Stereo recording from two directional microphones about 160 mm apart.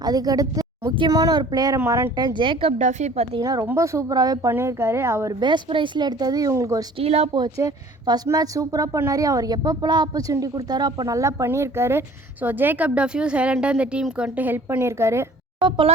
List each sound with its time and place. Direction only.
0.0 s a woman's voice: 25° right (ahead or behind); by 3.2 s 45° right (ahead or behind)
3.4 s a woman's voice: 20° right (ahead or behind)
5.4 s a woman's voice: 30° right (ahead or behind)
7.0 s speech: 40° right (ahead or behind)
7.3 s a woman's voice: 25° right (ahead or behind)